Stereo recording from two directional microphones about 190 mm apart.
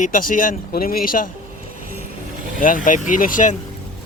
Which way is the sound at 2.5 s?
45° left (ahead or behind).